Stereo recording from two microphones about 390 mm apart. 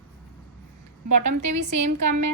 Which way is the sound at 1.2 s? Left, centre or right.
Right.